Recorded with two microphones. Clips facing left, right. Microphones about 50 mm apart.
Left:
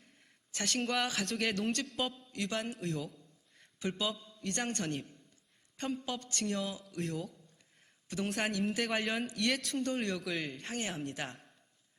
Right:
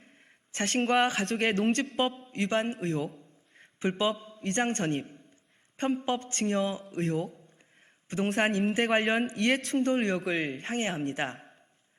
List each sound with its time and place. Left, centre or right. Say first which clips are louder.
0.5 s a man's voice: right 8 dB; right